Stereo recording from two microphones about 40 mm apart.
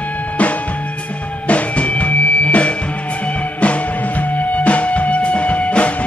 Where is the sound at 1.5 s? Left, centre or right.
Left.